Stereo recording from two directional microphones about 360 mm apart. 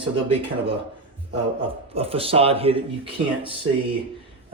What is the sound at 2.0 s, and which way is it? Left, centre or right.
Speech, centre.